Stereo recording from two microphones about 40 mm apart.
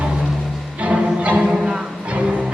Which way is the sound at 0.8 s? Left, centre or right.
Right.